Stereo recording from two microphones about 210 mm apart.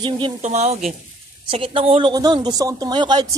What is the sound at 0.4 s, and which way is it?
Speech, 30° right (ahead or behind).